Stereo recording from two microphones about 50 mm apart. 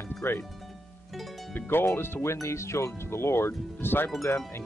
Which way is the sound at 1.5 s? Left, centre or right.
Left.